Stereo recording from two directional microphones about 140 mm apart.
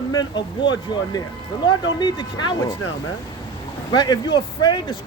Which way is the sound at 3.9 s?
30° left (ahead or behind).